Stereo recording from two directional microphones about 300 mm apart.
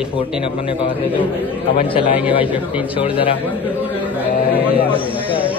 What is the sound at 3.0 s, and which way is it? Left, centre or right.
Speech, centre.